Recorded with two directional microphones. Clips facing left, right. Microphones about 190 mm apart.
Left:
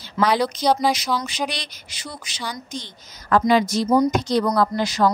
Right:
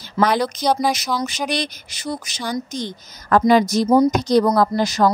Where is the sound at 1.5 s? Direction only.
45° right (ahead or behind).